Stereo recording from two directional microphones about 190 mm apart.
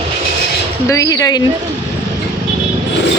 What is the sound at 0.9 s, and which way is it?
Speech, 15° left (ahead or behind).